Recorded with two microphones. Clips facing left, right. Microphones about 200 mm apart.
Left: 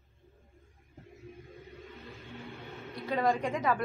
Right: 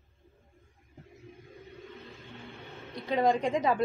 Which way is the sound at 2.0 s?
Centre (ahead or behind).